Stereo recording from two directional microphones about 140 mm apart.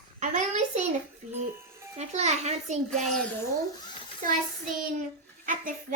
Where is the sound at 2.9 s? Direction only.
Centre (ahead or behind).